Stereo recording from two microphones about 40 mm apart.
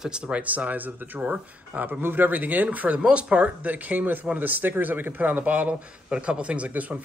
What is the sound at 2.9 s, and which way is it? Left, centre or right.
A man's voice, right.